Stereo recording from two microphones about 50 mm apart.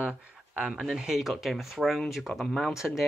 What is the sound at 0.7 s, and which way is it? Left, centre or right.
Speech, centre.